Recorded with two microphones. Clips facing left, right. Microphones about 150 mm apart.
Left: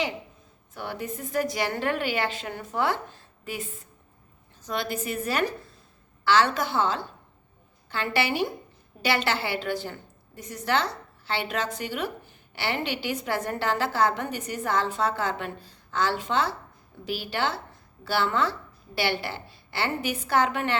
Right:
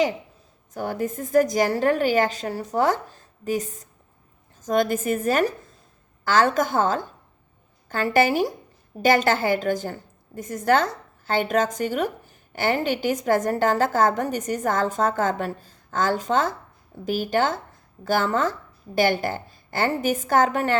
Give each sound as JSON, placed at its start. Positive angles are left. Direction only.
{"t": 0.7, "sound": "a woman's voice", "side_deg": -40}